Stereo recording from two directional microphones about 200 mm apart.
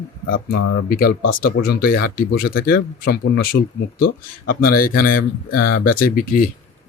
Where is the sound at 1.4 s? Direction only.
50° left (ahead or behind).